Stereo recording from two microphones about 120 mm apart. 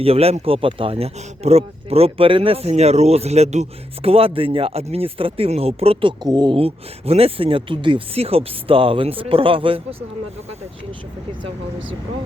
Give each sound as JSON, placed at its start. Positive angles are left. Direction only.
{"t": 0.0, "sound": "speech", "side_deg": -55}
{"t": 6.6, "sound": "speech", "side_deg": -55}